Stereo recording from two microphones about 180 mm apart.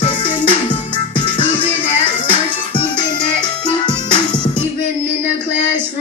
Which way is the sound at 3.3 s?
30° left (ahead or behind).